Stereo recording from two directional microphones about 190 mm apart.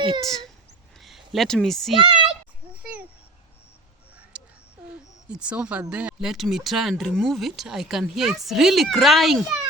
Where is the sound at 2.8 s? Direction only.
5° right (ahead or behind).